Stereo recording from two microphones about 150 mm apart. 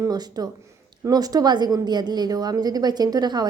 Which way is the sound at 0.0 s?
25° right (ahead or behind).